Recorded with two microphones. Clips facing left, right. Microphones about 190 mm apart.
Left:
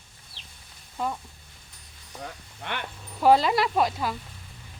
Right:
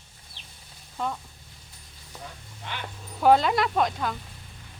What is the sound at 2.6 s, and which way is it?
Speech, 60° left (ahead or behind).